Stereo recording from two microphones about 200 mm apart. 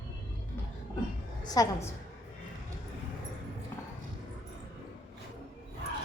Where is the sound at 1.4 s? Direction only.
20° left (ahead or behind).